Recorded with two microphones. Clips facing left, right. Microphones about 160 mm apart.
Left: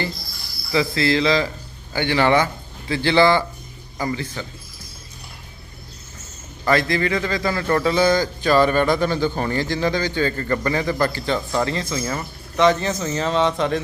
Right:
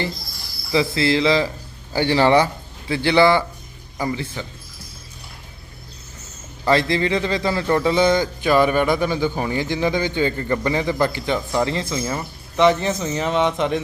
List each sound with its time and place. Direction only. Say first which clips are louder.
0.7 s a man's voice: right 1 dB; 20° right (ahead or behind)
2.9 s a man's voice: right 1 dB; 20° right (ahead or behind)
6.7 s a man's voice: right 1 dB; 25° right (ahead or behind)